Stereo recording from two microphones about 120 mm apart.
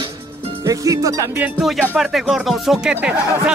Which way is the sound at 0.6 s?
30° right (ahead or behind).